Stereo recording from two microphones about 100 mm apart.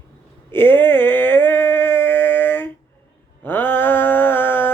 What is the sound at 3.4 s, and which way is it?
Mantra, 20° left (ahead or behind).